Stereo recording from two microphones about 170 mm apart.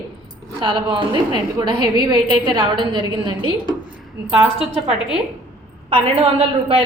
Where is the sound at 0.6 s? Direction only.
30° right (ahead or behind).